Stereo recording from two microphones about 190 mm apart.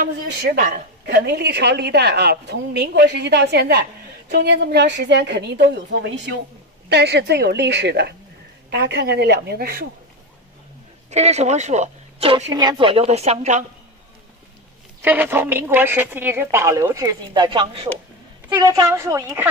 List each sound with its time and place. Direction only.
0.0 s speech: 45° right (ahead or behind)
1.1 s a woman's voice: 60° right (ahead or behind)
11.1 s speech: 35° right (ahead or behind)
15.0 s a woman's voice: 10° right (ahead or behind)